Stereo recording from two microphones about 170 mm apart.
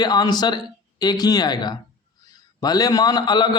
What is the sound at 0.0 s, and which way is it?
A man's voice, 25° left (ahead or behind).